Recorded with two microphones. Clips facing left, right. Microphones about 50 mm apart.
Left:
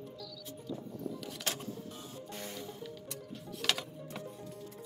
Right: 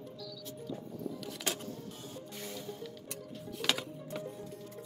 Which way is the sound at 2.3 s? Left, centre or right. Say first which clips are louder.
Left 2 dB; left.